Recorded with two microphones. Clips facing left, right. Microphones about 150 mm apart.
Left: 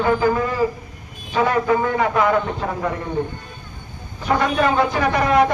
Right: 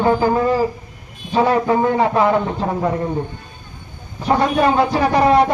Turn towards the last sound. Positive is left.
turn(degrees=-30)  # may be behind; listen again after turning